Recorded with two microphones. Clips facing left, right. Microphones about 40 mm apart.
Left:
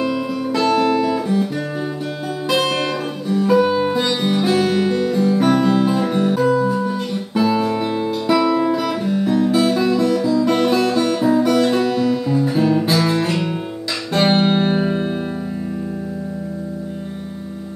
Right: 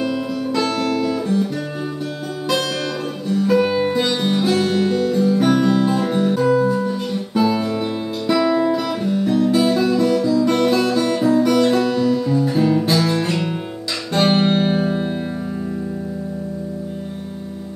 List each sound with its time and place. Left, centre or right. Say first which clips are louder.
0.0 s music: left 1 dB; centre
2.6 s music: left 4 dB; left
3.3 s music: left 2 dB; centre
6.9 s music: even; centre
14.1 s guitar: left 1 dB; centre